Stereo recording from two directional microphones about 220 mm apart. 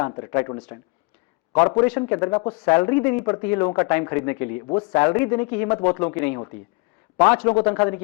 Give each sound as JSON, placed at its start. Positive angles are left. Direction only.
{"t": 0.0, "sound": "a man's voice", "side_deg": 15}